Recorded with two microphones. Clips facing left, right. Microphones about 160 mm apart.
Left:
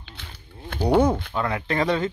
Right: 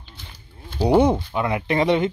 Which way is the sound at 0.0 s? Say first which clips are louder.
Left 1 dB; 65° left (ahead or behind).